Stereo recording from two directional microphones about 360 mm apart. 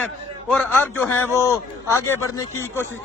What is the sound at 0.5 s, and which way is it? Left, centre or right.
A man's voice, centre.